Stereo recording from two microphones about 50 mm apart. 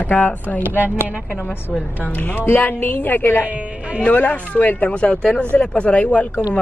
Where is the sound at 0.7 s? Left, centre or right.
Right.